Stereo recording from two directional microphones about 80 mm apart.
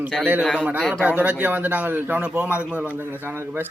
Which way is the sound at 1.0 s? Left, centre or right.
Centre.